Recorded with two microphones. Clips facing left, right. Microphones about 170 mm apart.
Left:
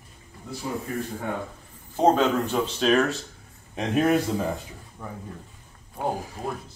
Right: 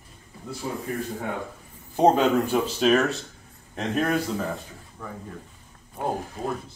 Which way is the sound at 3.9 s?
15° left (ahead or behind).